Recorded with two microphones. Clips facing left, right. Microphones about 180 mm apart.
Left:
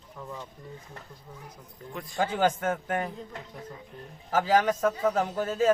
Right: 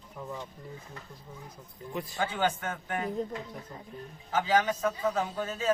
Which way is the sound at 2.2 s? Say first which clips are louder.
Left 5 dB; 45° left (ahead or behind).